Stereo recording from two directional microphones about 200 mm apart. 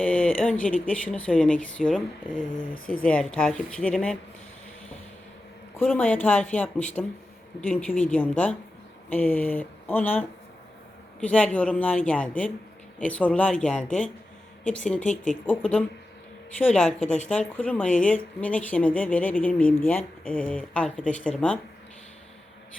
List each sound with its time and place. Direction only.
0.0 s speech: 5° left (ahead or behind)
2.7 s speech: 45° left (ahead or behind)
3.0 s speech: 5° left (ahead or behind)
5.7 s speech: 10° left (ahead or behind)
15.0 s speech: 40° left (ahead or behind)
15.3 s speech: 5° left (ahead or behind)